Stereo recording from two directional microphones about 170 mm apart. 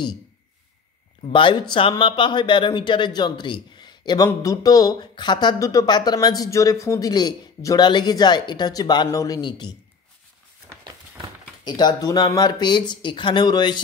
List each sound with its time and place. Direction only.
1.2 s speech: 30° left (ahead or behind)
11.6 s speech: 25° left (ahead or behind)